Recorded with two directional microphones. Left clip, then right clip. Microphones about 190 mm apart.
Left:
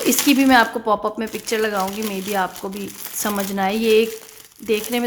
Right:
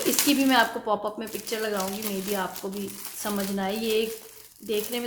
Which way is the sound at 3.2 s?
50° left (ahead or behind).